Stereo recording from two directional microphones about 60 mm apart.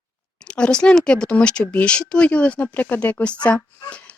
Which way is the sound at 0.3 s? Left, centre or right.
Centre.